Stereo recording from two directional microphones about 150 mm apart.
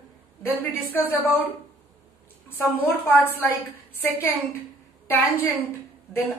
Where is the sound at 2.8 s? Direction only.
15° left (ahead or behind).